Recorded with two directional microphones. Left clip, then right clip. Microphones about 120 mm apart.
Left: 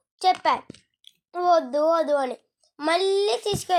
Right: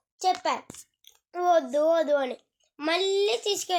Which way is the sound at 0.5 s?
45° left (ahead or behind).